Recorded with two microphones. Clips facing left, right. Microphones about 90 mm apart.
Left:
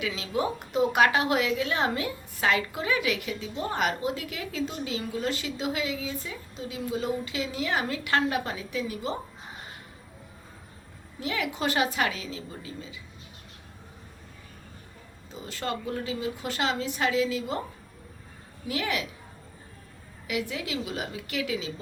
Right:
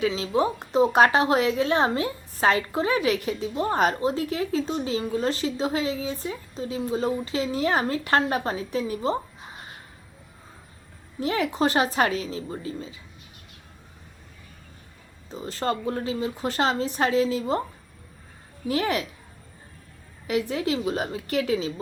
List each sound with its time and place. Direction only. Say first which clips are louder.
0.0 s a woman's voice: right 6 dB; 35° right (ahead or behind)
11.2 s a woman's voice: right 6 dB; 35° right (ahead or behind)
15.3 s a woman's voice: right 6 dB; 35° right (ahead or behind)
18.7 s a woman's voice: right 5 dB; 40° right (ahead or behind)
20.2 s a woman's voice: right 6 dB; 35° right (ahead or behind)